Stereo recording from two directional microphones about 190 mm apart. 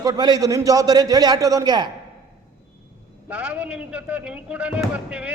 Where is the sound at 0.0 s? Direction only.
20° right (ahead or behind).